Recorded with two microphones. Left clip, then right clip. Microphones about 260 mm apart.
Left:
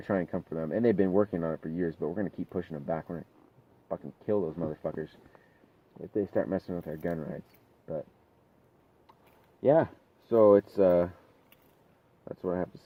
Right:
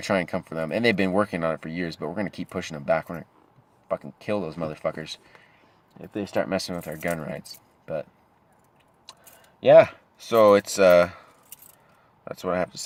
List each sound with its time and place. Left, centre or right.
0.1 s speech: right
6.1 s speech: right
6.7 s speech: right
9.6 s speech: right
12.2 s speech: right